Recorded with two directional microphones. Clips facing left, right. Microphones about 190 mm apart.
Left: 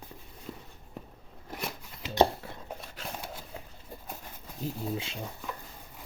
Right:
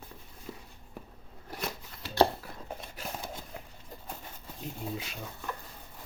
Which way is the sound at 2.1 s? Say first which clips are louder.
Left 1 dB; 25° left (ahead or behind).